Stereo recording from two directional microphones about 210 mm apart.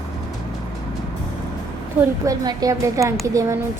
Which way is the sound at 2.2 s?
20° right (ahead or behind).